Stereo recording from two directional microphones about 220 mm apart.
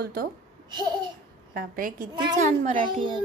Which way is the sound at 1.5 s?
40° right (ahead or behind).